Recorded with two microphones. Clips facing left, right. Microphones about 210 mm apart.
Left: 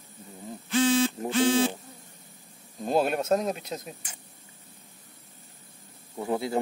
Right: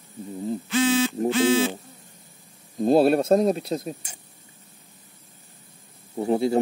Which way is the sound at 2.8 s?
35° right (ahead or behind).